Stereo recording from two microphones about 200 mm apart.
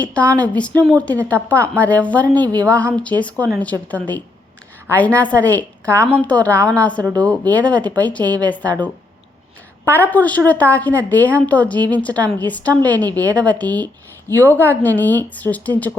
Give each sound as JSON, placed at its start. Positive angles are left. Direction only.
{"t": 0.0, "sound": "a woman's voice", "side_deg": 5}
{"t": 5.8, "sound": "a woman's voice", "side_deg": -15}
{"t": 6.1, "sound": "a woman's voice", "side_deg": 5}
{"t": 6.5, "sound": "a woman's voice", "side_deg": -15}
{"t": 6.7, "sound": "a woman's voice", "side_deg": 5}
{"t": 8.2, "sound": "a woman's voice", "side_deg": -20}
{"t": 9.9, "sound": "a woman's voice", "side_deg": 10}
{"t": 13.1, "sound": "a woman's voice", "side_deg": -20}
{"t": 13.3, "sound": "a woman's voice", "side_deg": 5}